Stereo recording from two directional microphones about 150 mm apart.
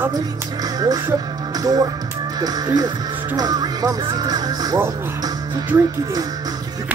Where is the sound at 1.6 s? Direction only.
25° right (ahead or behind).